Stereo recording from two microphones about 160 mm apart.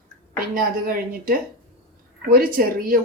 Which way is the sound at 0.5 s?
65° right (ahead or behind).